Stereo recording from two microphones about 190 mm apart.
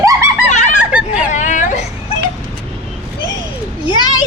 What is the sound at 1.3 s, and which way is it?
Whimper, 40° left (ahead or behind).